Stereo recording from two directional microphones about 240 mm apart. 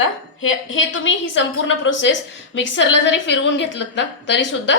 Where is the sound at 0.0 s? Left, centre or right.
Left.